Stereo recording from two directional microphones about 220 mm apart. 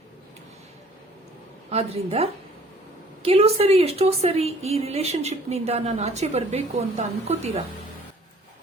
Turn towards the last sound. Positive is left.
turn(degrees=-25)  # may be behind; listen again after turning